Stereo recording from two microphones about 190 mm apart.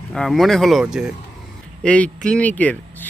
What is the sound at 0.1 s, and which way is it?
Speech, centre (ahead or behind).